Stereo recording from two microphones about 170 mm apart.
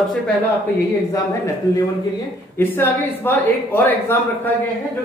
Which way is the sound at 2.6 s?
10° left (ahead or behind).